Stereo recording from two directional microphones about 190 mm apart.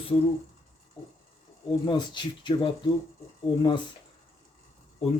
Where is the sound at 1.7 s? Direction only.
25° left (ahead or behind).